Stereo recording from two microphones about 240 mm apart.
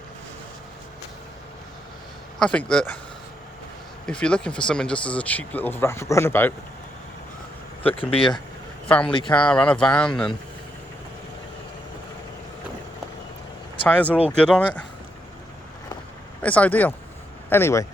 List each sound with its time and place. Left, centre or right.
2.4 s speech: centre
4.0 s speech: centre
8.1 s speech: left
9.3 s speech: centre
13.8 s speech: centre
16.4 s speech: centre